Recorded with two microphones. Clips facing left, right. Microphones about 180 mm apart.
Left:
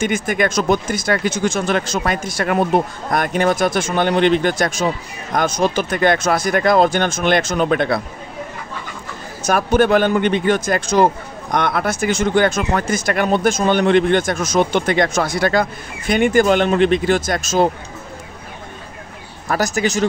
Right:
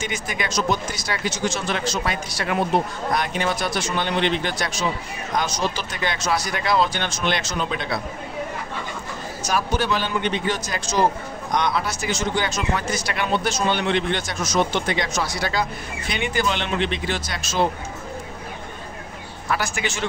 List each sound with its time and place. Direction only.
0.0 s speech: 50° left (ahead or behind)
9.4 s speech: 55° left (ahead or behind)
19.5 s speech: 40° left (ahead or behind)